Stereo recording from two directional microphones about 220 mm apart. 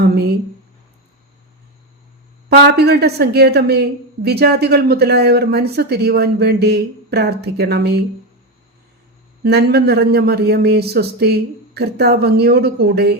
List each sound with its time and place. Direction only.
0.0 s a woman's voice: 50° right (ahead or behind)
2.5 s a woman's voice: 45° right (ahead or behind)
9.4 s a woman's voice: 45° right (ahead or behind)